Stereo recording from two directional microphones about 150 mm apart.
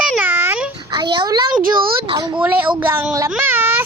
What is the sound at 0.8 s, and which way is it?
Speech, 30° right (ahead or behind).